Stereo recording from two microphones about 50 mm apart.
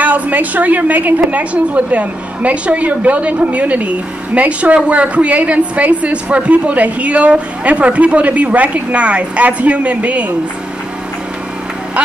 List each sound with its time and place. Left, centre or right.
0.0 s a woman's voice: right